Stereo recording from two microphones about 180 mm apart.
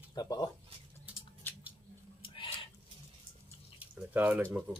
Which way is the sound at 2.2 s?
30° left (ahead or behind).